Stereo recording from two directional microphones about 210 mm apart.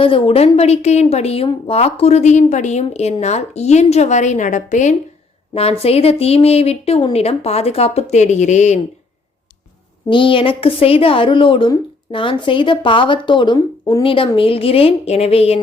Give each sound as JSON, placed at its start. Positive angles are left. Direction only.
{"t": 0.0, "sound": "a woman's voice", "side_deg": 25}
{"t": 10.1, "sound": "a woman's voice", "side_deg": 25}